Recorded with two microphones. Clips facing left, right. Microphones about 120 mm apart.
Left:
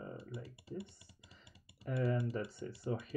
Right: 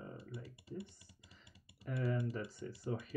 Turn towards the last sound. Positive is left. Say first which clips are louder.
# left 2 dB
turn(degrees=25)  # may be behind; listen again after turning